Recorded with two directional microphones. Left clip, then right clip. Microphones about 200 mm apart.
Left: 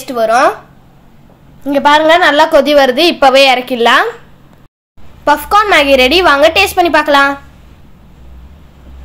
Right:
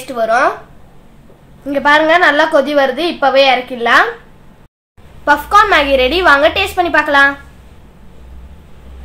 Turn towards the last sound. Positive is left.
turn(degrees=40)  # may be behind; listen again after turning